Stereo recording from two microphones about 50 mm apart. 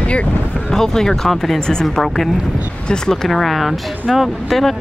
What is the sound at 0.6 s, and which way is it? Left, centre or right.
Speech, centre.